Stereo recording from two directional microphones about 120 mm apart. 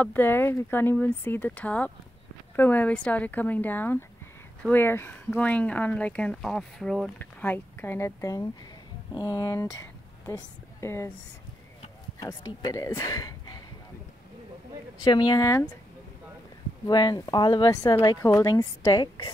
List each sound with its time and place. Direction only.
0.0 s speech: 15° left (ahead or behind)
7.2 s speech: 15° left (ahead or behind)
12.2 s speech: 30° left (ahead or behind)
15.0 s a woman's voice: 35° left (ahead or behind)
16.8 s a woman's voice: 35° left (ahead or behind)